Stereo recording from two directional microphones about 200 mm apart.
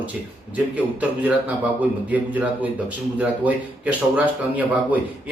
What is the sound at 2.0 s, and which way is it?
Speech, 10° right (ahead or behind).